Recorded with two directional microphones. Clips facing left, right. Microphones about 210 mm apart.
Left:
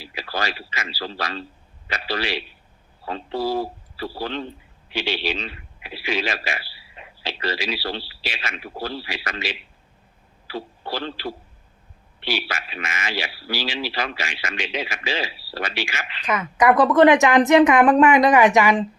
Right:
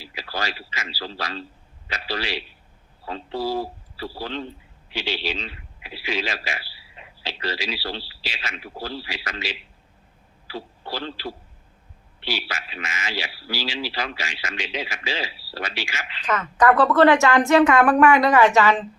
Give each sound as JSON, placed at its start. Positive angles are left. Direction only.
{"t": 0.0, "sound": "a man's voice", "side_deg": 60}
{"t": 16.2, "sound": "a woman's voice", "side_deg": 10}